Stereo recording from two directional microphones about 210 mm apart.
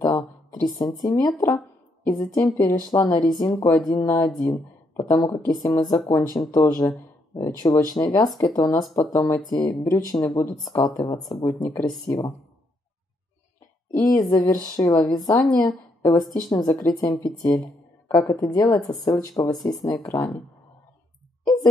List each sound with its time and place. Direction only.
0.0 s a sound: 20° left (ahead or behind)
2.0 s speech: 15° left (ahead or behind)
13.9 s speech: 15° left (ahead or behind)